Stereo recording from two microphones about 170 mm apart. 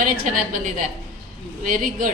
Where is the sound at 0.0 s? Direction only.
50° right (ahead or behind).